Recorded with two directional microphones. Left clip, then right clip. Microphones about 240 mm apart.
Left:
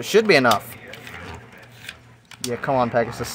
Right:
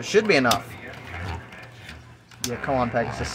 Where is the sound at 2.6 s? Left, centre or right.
Left.